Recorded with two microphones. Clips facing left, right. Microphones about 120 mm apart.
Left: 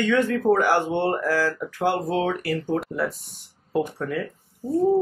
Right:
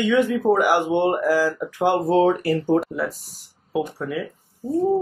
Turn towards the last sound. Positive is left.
turn(degrees=-5)  # may be behind; listen again after turning